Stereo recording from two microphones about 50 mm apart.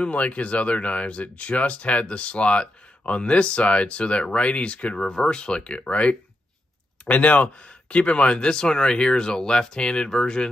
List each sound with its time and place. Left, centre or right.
0.0 s speech: left